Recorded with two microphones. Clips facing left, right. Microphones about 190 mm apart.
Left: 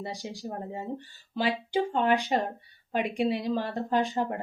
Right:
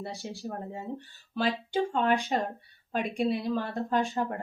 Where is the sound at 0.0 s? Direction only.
15° left (ahead or behind).